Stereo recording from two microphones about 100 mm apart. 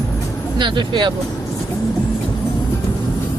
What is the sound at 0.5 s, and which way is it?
Speech, 50° right (ahead or behind).